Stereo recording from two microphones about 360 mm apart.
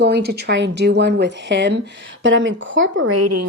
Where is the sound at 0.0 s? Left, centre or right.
Right.